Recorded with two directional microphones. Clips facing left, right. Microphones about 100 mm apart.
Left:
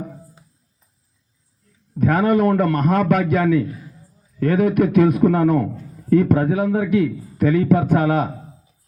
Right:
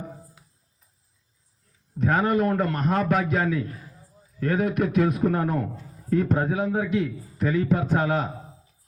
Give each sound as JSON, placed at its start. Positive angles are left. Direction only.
{"t": 2.0, "sound": "a man's voice", "side_deg": 60}